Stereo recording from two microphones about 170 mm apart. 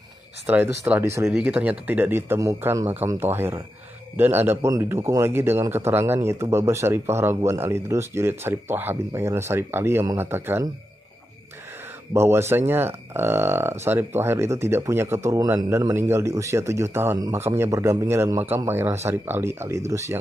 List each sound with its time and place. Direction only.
0.7 s a man's voice: 15° right (ahead or behind)
12.1 s a man's voice: 15° right (ahead or behind)